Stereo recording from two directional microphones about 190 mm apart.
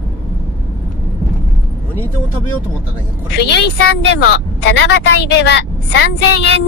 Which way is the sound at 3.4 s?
60° left (ahead or behind).